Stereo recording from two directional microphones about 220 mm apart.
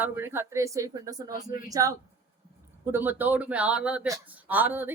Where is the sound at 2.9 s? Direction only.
10° right (ahead or behind).